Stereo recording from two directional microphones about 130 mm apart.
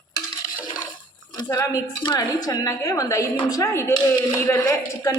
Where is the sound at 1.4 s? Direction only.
25° left (ahead or behind).